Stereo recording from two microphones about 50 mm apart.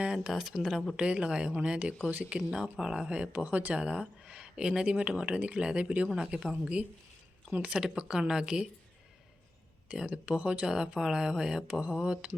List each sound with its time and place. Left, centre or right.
0.0 s speech: centre
0.9 s speech: right
2.5 s speech: centre
3.1 s speech: right
3.8 s speech: right
6.1 s speech: centre
9.9 s speech: centre